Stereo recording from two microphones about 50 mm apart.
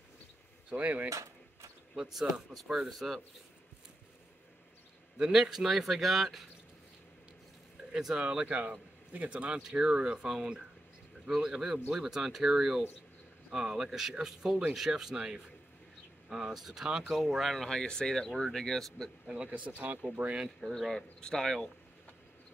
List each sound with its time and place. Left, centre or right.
0.7 s speech: right
1.0 s a sound: right
2.0 s speech: centre
5.1 s speech: centre
7.9 s speech: centre
19.2 s speech: right
20.4 s speech: centre